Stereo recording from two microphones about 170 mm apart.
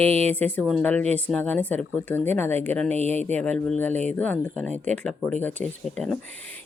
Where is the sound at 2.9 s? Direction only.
40° right (ahead or behind).